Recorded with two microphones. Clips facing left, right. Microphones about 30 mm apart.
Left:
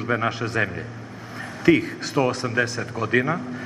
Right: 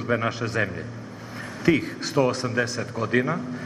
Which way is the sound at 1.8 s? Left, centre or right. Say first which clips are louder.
Even; centre.